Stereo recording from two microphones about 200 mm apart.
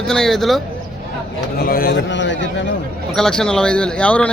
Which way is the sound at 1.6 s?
45° left (ahead or behind).